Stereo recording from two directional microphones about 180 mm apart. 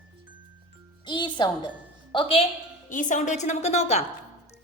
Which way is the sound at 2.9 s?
45° left (ahead or behind).